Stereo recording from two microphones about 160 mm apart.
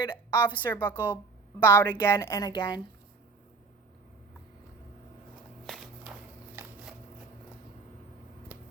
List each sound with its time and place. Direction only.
0.0 s a woman's voice: 30° left (ahead or behind)
0.7 s a woman's voice: 10° left (ahead or behind); by 2.8 s 25° left (ahead or behind)
5.6 s a sound: centre (ahead or behind)